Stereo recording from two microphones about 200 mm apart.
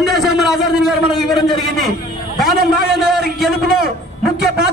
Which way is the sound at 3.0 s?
5° right (ahead or behind).